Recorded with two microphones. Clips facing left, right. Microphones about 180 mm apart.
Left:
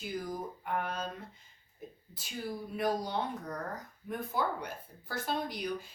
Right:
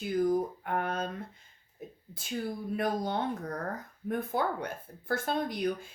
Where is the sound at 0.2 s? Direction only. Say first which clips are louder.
Right 11 dB; 55° right (ahead or behind).